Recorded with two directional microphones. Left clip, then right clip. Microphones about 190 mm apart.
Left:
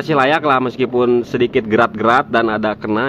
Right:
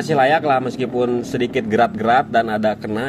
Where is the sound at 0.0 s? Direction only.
30° left (ahead or behind).